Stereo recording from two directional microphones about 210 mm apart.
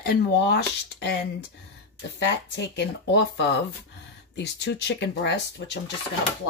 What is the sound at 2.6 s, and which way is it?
Speech, 55° left (ahead or behind).